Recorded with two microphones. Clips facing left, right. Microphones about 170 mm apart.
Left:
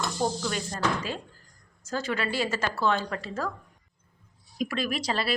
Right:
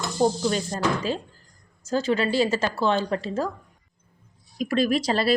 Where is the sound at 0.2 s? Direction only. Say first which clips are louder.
Right 9 dB; 25° right (ahead or behind).